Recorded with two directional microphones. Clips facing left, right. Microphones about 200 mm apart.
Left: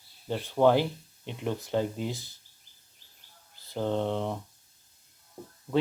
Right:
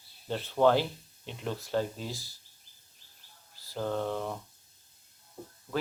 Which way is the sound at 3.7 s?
20° left (ahead or behind).